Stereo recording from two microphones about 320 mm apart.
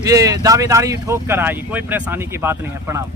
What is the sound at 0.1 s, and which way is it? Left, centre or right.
Speech, centre.